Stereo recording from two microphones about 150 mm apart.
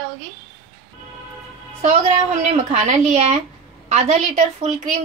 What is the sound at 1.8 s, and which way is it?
A woman's voice, 50° right (ahead or behind).